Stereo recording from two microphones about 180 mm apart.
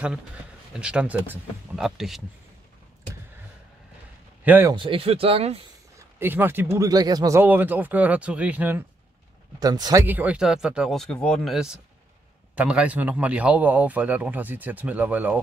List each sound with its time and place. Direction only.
0.7 s a man's voice: 5° right (ahead or behind)
4.5 s speech: 10° right (ahead or behind)
4.7 s speech: 30° right (ahead or behind)
5.9 s speech: 10° right (ahead or behind)
9.6 s speech: 20° right (ahead or behind)
10.0 s a man's voice: 10° right (ahead or behind)